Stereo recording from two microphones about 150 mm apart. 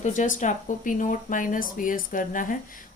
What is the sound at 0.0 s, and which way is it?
Speech, 55° left (ahead or behind).